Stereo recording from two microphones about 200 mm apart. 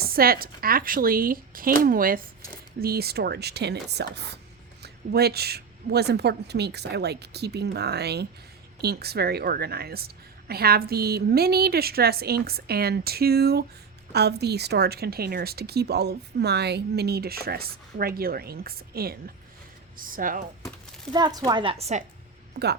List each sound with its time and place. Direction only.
0.0 s a woman's voice: 50° right (ahead or behind)
21.1 s a woman's voice: 20° right (ahead or behind)
22.5 s a woman's voice: 55° right (ahead or behind)